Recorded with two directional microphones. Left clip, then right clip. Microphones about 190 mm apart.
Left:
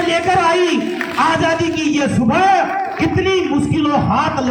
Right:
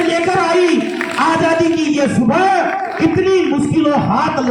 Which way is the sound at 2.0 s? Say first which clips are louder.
Even; 30° right (ahead or behind).